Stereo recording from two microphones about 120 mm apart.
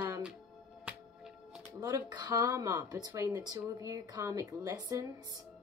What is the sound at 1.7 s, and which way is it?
A woman's voice, 35° right (ahead or behind).